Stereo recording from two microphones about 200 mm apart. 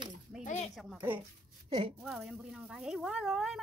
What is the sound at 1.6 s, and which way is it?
Speech, 25° right (ahead or behind).